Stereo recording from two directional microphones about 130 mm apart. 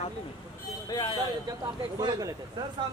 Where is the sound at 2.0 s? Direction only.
35° right (ahead or behind).